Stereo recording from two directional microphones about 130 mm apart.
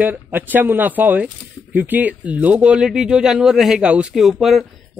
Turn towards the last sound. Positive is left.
turn(degrees=0)  # may be behind; listen again after turning